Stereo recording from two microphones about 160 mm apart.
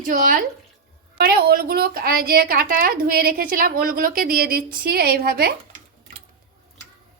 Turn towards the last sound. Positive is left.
turn(degrees=-75)  # may be behind; listen again after turning